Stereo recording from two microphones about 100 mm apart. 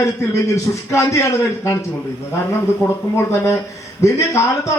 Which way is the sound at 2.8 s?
30° left (ahead or behind).